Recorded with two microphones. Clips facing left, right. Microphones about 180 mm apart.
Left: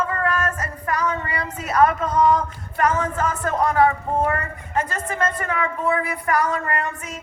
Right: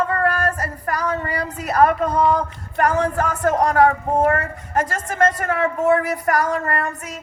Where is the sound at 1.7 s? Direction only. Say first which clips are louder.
Right 2 dB; 35° right (ahead or behind).